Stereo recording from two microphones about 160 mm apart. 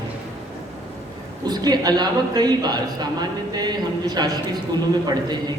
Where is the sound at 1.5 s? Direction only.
25° right (ahead or behind).